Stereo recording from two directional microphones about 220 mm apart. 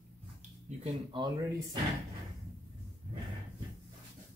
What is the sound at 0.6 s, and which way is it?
Speech, 30° right (ahead or behind).